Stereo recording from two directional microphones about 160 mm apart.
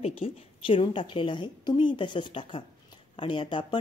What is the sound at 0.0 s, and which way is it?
A woman's voice, 35° left (ahead or behind).